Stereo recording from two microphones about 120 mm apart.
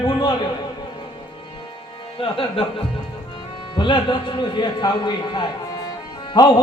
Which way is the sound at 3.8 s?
40° left (ahead or behind).